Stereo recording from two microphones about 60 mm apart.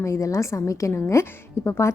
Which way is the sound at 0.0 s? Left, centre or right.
Left.